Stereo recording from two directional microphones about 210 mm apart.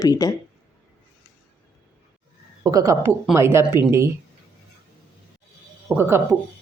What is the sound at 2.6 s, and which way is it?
Speech, 15° right (ahead or behind).